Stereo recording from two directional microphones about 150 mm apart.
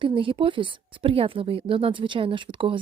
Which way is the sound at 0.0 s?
35° right (ahead or behind).